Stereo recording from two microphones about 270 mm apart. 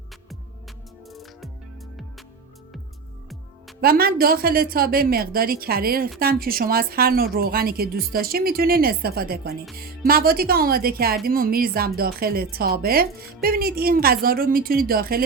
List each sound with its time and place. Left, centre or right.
1.1 s music: centre
3.8 s speech: right